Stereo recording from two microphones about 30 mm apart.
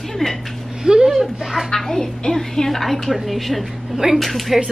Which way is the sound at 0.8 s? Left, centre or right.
Right.